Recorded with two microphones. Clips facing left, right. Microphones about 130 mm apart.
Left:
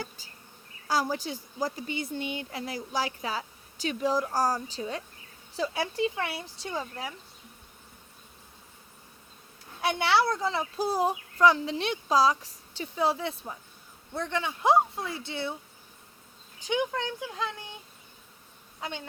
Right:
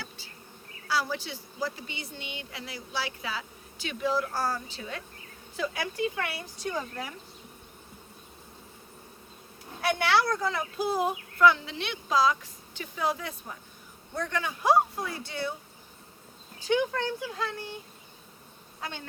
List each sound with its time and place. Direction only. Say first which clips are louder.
1.1 s speech: left 2 dB; 40° left (ahead or behind); by 7.1 s 25° left (ahead or behind)
9.8 s speech: even; 20° left (ahead or behind)
16.6 s speech: right 2 dB; 15° left (ahead or behind)
18.8 s speech: left 2 dB; 20° left (ahead or behind)